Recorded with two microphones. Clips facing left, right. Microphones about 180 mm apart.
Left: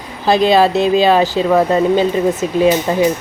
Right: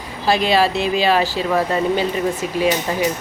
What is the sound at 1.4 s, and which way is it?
Speech, 30° left (ahead or behind).